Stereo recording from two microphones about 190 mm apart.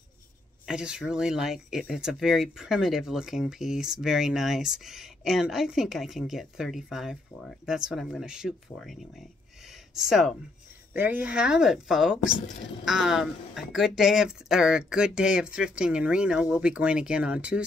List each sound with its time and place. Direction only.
0.7 s speech: 5° right (ahead or behind)
12.2 s speech: 45° left (ahead or behind)
12.8 s speech: centre (ahead or behind)